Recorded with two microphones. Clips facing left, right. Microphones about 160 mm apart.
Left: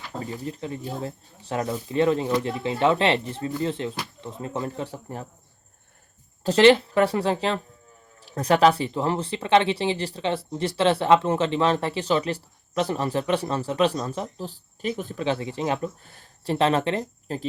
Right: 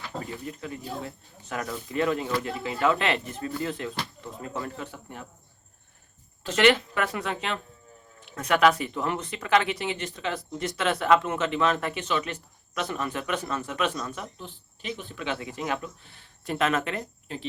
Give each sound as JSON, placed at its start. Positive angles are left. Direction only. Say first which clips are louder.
{"t": 0.2, "sound": "speech", "louder": "left 5 dB", "side_deg": 30}
{"t": 6.4, "sound": "speech", "louder": "left 6 dB", "side_deg": 30}
{"t": 16.0, "sound": "speech", "louder": "left 5 dB", "side_deg": 45}